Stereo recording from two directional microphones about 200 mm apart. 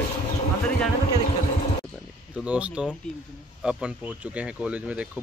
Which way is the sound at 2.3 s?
5° right (ahead or behind).